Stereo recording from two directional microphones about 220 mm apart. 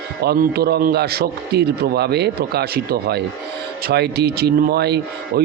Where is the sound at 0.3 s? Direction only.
45° right (ahead or behind).